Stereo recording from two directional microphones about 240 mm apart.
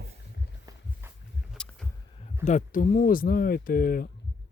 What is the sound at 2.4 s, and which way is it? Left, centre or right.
Speech, left.